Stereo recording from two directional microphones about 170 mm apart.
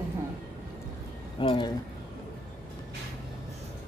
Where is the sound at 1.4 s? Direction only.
30° left (ahead or behind).